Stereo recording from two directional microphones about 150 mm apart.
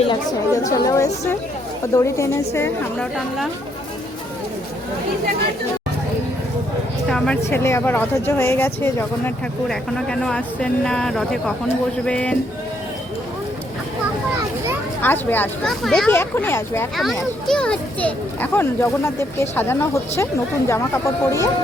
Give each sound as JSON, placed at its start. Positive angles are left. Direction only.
{"t": 0.1, "sound": "a woman's voice", "side_deg": 25}
{"t": 3.0, "sound": "speech", "side_deg": 0}
{"t": 7.1, "sound": "a child's voice", "side_deg": 5}
{"t": 9.6, "sound": "a child's voice", "side_deg": 5}
{"t": 15.0, "sound": "a child's voice", "side_deg": 15}
{"t": 15.7, "sound": "speech", "side_deg": 0}
{"t": 16.0, "sound": "a child's voice", "side_deg": 15}
{"t": 17.4, "sound": "a child's voice", "side_deg": 5}